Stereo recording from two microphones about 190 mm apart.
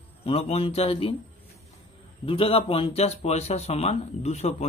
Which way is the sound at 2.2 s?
30° left (ahead or behind).